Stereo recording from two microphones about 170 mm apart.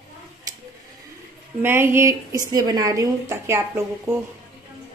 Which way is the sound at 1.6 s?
15° right (ahead or behind).